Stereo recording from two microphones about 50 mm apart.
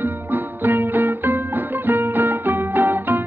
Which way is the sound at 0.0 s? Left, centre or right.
Right.